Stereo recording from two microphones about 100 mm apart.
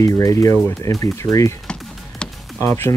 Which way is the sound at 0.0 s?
35° left (ahead or behind).